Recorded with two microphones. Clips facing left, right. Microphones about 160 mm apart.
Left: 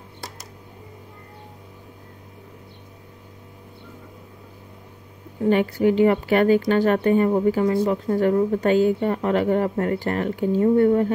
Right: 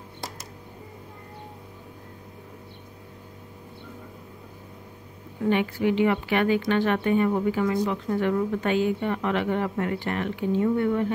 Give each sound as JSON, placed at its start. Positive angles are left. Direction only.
{"t": 5.4, "sound": "a woman's voice", "side_deg": 40}